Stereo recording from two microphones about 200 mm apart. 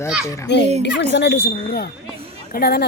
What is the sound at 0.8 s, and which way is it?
A woman's voice, 60° left (ahead or behind).